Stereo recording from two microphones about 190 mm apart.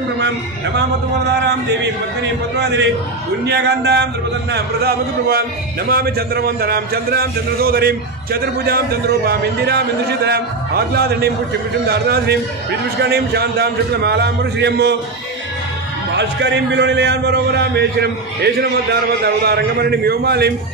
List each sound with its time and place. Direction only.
1.3 s a man's voice: 60° right (ahead or behind)
16.2 s a man's voice: 65° right (ahead or behind)